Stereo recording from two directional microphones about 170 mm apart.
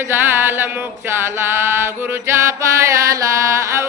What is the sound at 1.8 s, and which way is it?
Chant, 15° right (ahead or behind).